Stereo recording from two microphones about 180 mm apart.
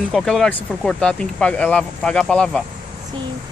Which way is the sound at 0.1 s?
5° left (ahead or behind).